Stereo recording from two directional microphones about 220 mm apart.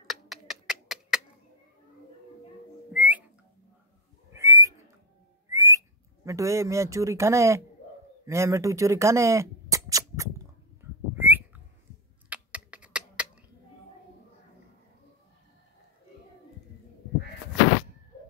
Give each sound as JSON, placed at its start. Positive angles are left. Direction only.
{"t": 0.0, "sound": "a sound", "side_deg": 0}
{"t": 2.9, "sound": "whistling", "side_deg": -5}
{"t": 4.4, "sound": "whistling", "side_deg": -15}
{"t": 5.5, "sound": "speech", "side_deg": -15}
{"t": 11.1, "sound": "whistling", "side_deg": -10}
{"t": 12.3, "sound": "typing", "side_deg": -5}